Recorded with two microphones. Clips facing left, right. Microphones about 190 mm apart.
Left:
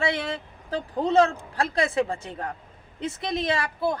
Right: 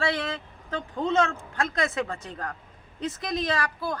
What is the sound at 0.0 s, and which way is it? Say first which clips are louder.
Speech: left 1 dB; 25° left (ahead or behind).